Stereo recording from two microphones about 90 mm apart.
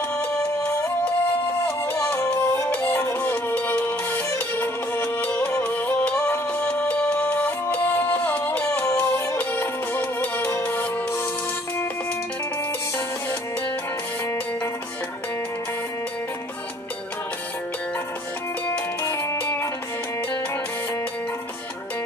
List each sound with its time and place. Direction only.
0.1 s music: 15° left (ahead or behind)
1.8 s music: 20° left (ahead or behind)
14.2 s music: 25° left (ahead or behind)
19.0 s music: 30° left (ahead or behind)